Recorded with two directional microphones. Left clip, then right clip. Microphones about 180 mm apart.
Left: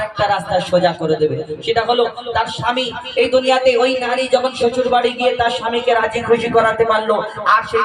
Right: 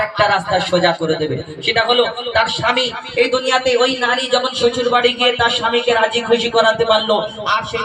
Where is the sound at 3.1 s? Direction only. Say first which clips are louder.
Left 2 dB; 20° left (ahead or behind).